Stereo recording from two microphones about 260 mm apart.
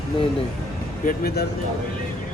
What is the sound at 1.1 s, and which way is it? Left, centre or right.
Speech, left.